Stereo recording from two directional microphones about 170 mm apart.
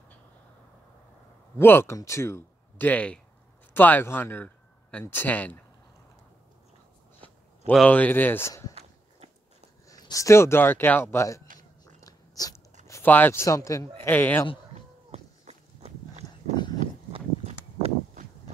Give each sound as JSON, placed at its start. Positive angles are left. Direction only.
{"t": 1.6, "sound": "speech", "side_deg": 15}
{"t": 7.7, "sound": "speech", "side_deg": 5}
{"t": 9.8, "sound": "speech", "side_deg": 20}
{"t": 11.8, "sound": "biting", "side_deg": 20}
{"t": 12.8, "sound": "speech", "side_deg": 15}
{"t": 15.0, "sound": "walk", "side_deg": -40}
{"t": 16.2, "sound": "a sound", "side_deg": -40}
{"t": 16.5, "sound": "clip-clop", "side_deg": 25}
{"t": 17.1, "sound": "walk", "side_deg": -35}